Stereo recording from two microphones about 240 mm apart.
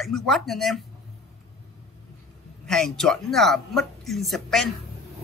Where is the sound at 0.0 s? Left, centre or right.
Centre.